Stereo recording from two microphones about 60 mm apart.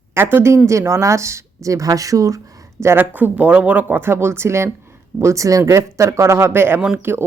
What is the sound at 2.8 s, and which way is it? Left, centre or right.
Speech, right.